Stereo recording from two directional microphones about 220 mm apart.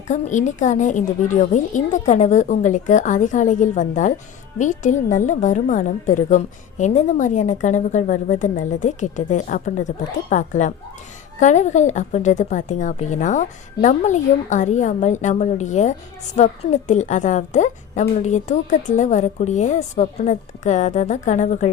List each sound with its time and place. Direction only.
0.1 s a woman's voice: 35° left (ahead or behind)